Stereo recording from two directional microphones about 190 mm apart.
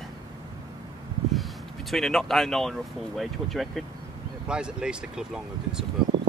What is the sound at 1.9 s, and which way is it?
Speech, centre (ahead or behind).